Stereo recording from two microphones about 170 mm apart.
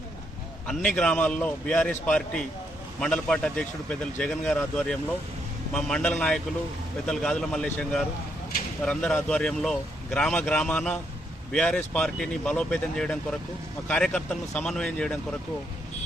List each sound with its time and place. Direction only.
0.7 s a man's voice: 5° left (ahead or behind)